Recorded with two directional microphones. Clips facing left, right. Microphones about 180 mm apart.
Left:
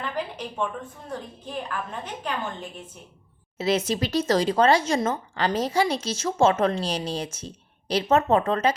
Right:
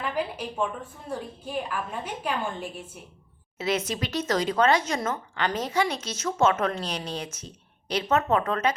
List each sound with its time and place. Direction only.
0.0 s a sound: 10° right (ahead or behind)
1.5 s a woman's voice: 10° right (ahead or behind)
3.6 s speech: 30° left (ahead or behind)